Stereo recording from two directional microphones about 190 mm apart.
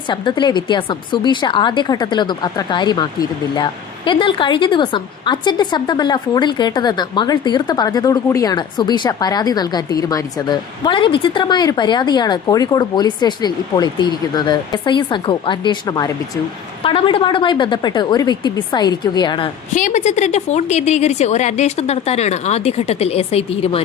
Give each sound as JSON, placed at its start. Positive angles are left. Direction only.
{"t": 0.1, "sound": "a woman's voice", "side_deg": 25}
{"t": 19.7, "sound": "a woman's voice", "side_deg": 40}